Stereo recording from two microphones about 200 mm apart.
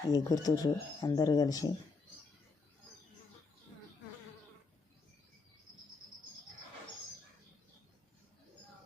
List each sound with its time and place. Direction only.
0.1 s speech: 20° left (ahead or behind)